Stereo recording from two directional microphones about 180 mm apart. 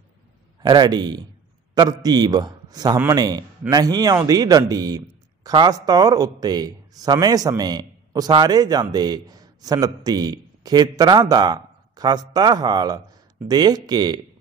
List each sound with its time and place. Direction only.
0.6 s a man's voice: 25° right (ahead or behind)